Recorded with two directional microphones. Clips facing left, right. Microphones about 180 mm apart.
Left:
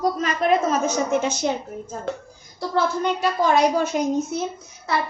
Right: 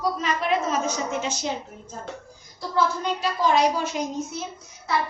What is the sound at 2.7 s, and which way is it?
A woman's voice, 55° left (ahead or behind).